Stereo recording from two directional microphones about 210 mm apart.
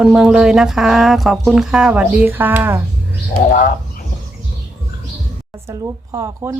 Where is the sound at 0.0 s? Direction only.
5° right (ahead or behind).